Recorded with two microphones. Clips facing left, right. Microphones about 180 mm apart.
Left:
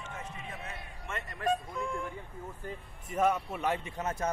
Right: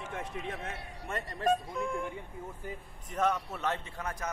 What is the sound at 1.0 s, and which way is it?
Speech, 35° right (ahead or behind).